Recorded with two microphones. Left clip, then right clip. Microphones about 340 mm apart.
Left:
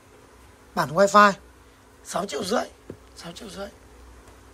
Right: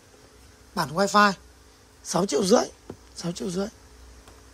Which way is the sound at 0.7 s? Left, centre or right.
Centre.